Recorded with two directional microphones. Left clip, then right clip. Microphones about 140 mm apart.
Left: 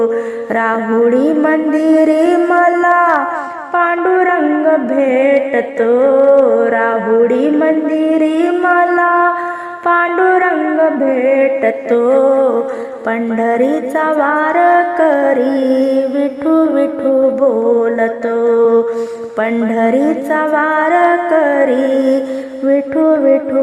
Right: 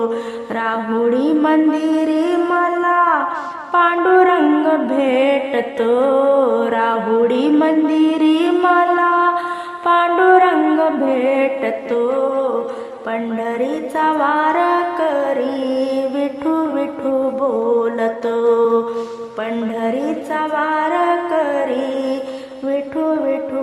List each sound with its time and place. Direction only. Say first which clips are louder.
0.5 s music: left 6 dB; 35° left (ahead or behind)
1.5 s a sound: left 3 dB; 35° left (ahead or behind)
3.8 s speech: even; 15° left (ahead or behind)
4.6 s music: left 4 dB; 20° left (ahead or behind)
11.6 s music: left 6 dB; 30° left (ahead or behind)
19.4 s music: left 8 dB; 40° left (ahead or behind)